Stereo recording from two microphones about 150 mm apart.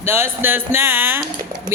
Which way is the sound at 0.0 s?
15° right (ahead or behind).